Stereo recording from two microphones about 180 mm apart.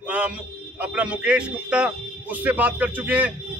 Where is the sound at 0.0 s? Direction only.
5° right (ahead or behind).